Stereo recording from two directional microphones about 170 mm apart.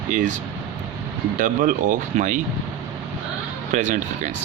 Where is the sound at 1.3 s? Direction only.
50° right (ahead or behind).